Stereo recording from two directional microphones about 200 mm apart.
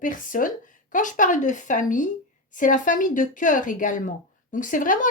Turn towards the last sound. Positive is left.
turn(degrees=40)  # may be behind; listen again after turning